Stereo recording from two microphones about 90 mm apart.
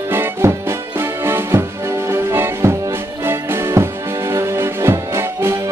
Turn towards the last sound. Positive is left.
turn(degrees=-30)  # may be behind; listen again after turning